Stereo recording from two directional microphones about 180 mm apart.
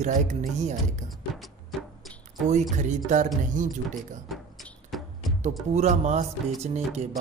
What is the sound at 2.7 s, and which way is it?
Speech, 45° right (ahead or behind).